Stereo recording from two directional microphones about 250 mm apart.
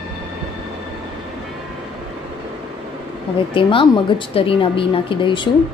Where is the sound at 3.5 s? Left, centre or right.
Centre.